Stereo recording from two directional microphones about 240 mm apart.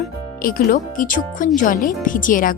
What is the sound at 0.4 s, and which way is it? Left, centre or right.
Speech, left.